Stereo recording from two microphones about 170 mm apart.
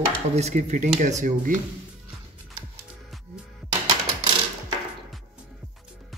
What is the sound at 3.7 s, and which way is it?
Music, 30° right (ahead or behind).